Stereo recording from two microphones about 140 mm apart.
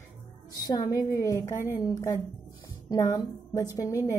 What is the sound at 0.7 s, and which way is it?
A woman's voice, 25° left (ahead or behind).